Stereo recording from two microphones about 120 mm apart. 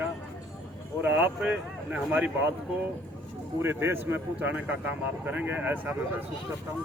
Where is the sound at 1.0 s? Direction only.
15° right (ahead or behind).